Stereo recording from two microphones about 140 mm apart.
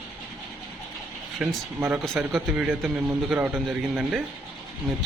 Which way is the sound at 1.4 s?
5° right (ahead or behind).